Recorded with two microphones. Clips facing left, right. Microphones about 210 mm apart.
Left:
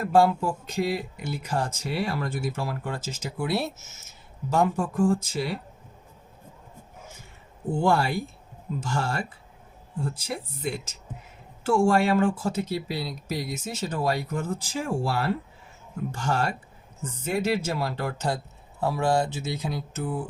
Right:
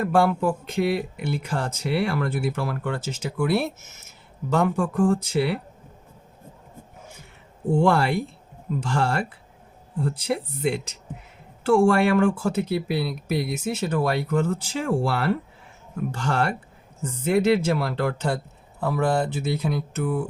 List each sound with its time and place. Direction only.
0.1 s speech: 60° right (ahead or behind)
7.9 s speech: 70° right (ahead or behind)